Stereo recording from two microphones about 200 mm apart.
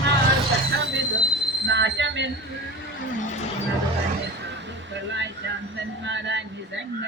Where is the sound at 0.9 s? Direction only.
65° right (ahead or behind).